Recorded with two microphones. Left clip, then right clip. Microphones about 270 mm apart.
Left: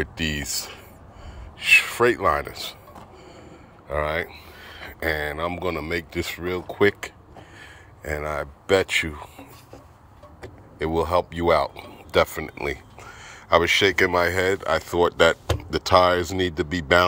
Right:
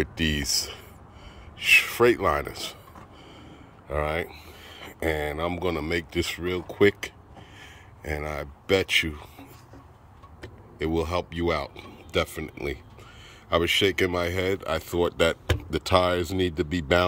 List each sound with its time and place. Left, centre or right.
0.0 s speech: centre
3.8 s speech: centre
8.1 s speech: centre
10.8 s speech: centre